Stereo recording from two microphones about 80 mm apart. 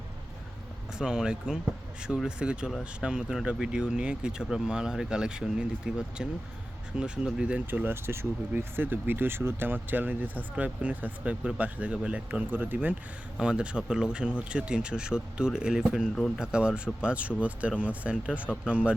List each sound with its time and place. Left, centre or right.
0.9 s speech: centre
7.7 s speech: right
13.4 s speech: centre